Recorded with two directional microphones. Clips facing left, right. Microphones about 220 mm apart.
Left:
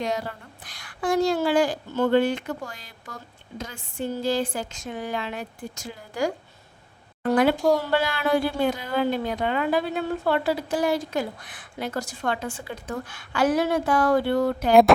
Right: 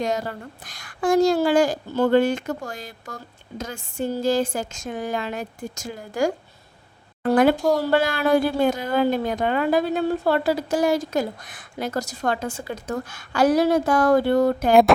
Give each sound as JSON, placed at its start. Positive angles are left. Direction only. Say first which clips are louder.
{"t": 0.0, "sound": "a woman's voice", "louder": "right 3 dB", "side_deg": -45}
{"t": 7.8, "sound": "a woman's voice", "louder": "right 4 dB", "side_deg": -45}
{"t": 14.7, "sound": "a sound", "louder": "even", "side_deg": 0}